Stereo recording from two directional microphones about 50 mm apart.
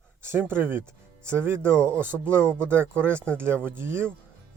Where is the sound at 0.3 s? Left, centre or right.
Right.